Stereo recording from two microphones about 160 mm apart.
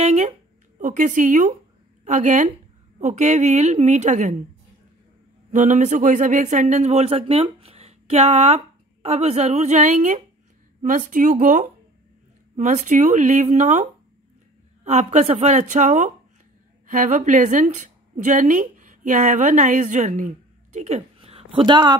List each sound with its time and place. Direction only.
0.0 s a sound: 45° right (ahead or behind)
0.7 s speech: 55° right (ahead or behind)
5.5 s speech: 50° right (ahead or behind)
14.9 s a woman's voice: 40° right (ahead or behind)